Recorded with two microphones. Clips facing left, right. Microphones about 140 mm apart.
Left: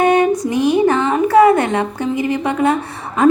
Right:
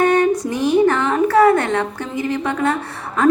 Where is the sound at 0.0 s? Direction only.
15° left (ahead or behind).